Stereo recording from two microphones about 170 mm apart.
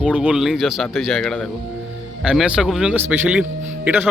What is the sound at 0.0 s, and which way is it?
Speech, 5° right (ahead or behind).